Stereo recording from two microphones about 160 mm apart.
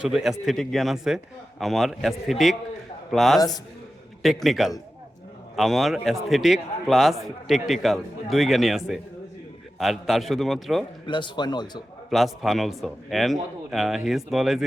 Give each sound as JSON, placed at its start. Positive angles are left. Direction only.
{"t": 0.0, "sound": "a man's voice", "side_deg": -5}
{"t": 11.0, "sound": "speech", "side_deg": 30}
{"t": 12.1, "sound": "a man's voice", "side_deg": 0}